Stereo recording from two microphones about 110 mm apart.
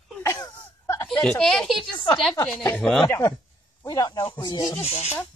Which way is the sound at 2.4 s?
15° left (ahead or behind).